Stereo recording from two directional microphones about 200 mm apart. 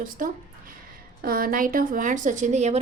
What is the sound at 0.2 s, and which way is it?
A woman's voice, 40° right (ahead or behind).